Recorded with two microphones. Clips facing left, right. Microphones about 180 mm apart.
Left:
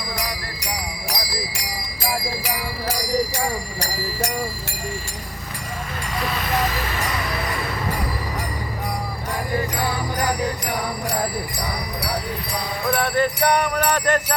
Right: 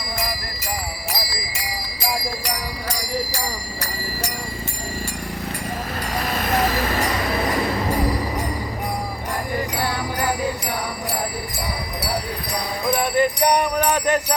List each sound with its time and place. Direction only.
1.5 s music: centre (ahead or behind)
6.1 s vehicle: 45° right (ahead or behind)
12.8 s jingle bell: 15° right (ahead or behind)